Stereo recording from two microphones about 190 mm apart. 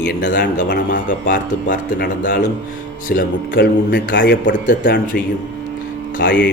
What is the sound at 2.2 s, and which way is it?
A man's voice, 55° left (ahead or behind).